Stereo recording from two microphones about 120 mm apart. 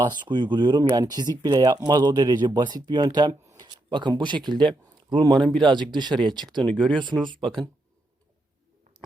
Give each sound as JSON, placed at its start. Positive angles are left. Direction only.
{"t": 0.0, "sound": "speech", "side_deg": -40}
{"t": 5.3, "sound": "speech", "side_deg": 5}
{"t": 5.9, "sound": "speech", "side_deg": -40}
{"t": 6.6, "sound": "speech", "side_deg": 5}
{"t": 7.0, "sound": "speech", "side_deg": -40}